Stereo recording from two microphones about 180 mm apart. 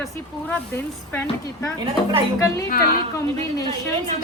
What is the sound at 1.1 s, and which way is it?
Speech, 10° left (ahead or behind).